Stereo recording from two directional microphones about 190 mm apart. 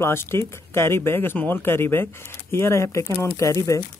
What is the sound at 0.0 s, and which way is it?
Speech, 10° left (ahead or behind).